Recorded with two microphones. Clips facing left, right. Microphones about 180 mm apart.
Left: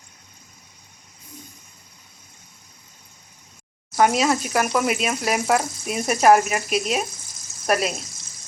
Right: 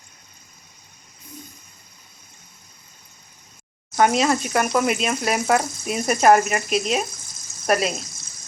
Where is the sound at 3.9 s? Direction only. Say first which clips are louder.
Even; 5° left (ahead or behind).